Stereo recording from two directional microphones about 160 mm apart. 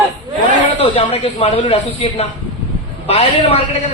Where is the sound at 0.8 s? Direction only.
40° left (ahead or behind).